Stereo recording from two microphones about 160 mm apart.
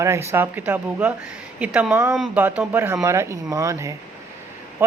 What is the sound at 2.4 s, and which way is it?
Speech, 10° right (ahead or behind).